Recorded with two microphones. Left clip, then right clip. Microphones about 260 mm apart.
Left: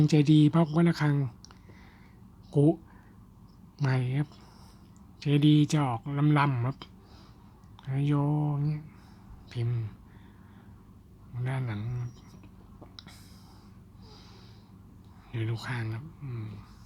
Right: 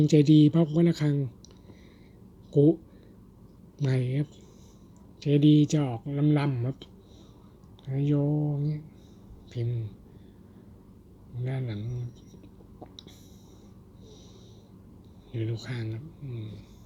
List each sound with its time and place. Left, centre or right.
0.0 s speech: centre
3.8 s speech: centre
7.9 s speech: centre
8.3 s mantra: left
9.5 s speech: centre
11.4 s speech: centre
15.3 s speech: centre